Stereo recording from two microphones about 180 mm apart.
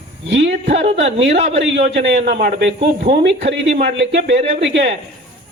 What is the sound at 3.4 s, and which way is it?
Speech, 75° right (ahead or behind).